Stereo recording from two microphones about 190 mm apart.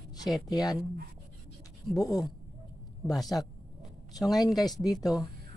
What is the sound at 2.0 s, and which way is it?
Speech, 20° left (ahead or behind).